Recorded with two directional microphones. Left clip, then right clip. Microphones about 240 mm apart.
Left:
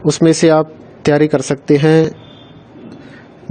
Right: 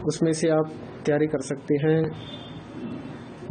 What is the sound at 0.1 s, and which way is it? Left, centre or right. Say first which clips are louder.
A man's voice: left 12 dB; left.